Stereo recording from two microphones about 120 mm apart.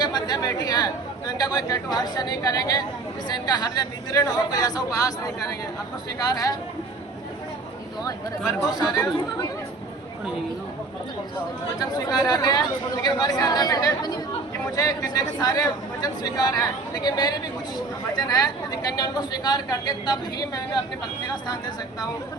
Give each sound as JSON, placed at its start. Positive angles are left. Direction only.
{"t": 0.0, "sound": "a woman's voice", "side_deg": 35}
{"t": 6.2, "sound": "a woman's voice", "side_deg": 30}
{"t": 8.8, "sound": "a woman's voice", "side_deg": 30}
{"t": 11.8, "sound": "a woman's voice", "side_deg": 30}